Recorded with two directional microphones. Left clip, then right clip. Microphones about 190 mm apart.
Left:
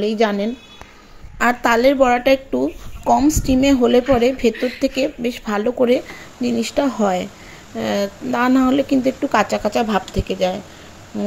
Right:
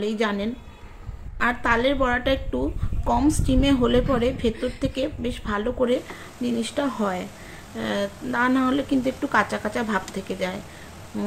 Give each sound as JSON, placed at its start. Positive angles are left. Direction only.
{"t": 0.0, "sound": "a woman's voice", "side_deg": 25}